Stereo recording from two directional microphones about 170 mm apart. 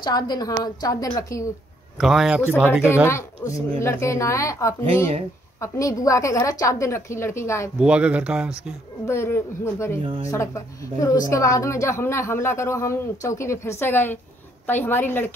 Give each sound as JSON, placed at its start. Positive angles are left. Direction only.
{"t": 0.0, "sound": "a woman's voice", "side_deg": 25}
{"t": 2.0, "sound": "speech", "side_deg": 0}
{"t": 3.1, "sound": "a woman's voice", "side_deg": 15}
{"t": 7.8, "sound": "speech", "side_deg": -5}
{"t": 9.0, "sound": "a woman's voice", "side_deg": 15}